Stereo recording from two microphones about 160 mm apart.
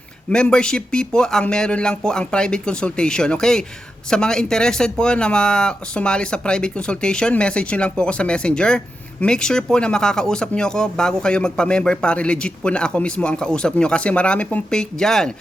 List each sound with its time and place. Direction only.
0.3 s speech: 5° left (ahead or behind)